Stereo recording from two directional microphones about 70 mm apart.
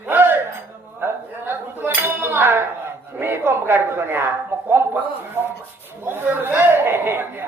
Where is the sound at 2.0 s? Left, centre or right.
Right.